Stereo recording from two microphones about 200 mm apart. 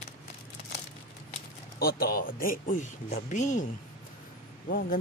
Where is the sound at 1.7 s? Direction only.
50° left (ahead or behind).